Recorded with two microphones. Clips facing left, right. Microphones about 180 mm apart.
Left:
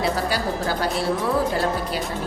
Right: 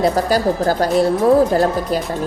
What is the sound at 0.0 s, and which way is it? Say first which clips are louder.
Speech: right 8 dB; 45° right (ahead or behind).